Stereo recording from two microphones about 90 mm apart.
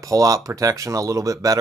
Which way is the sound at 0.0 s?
40° right (ahead or behind).